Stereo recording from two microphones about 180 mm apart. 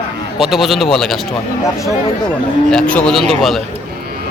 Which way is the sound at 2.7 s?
5° left (ahead or behind).